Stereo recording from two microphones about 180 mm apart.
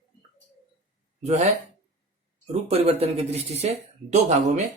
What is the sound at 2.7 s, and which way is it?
Speech, 35° right (ahead or behind).